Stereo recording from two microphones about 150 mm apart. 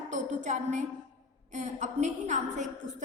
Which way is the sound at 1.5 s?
55° right (ahead or behind).